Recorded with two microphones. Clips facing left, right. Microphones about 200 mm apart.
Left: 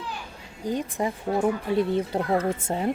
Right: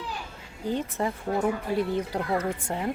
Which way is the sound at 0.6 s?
15° left (ahead or behind).